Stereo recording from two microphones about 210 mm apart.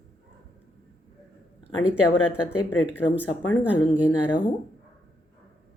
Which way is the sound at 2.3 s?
5° right (ahead or behind).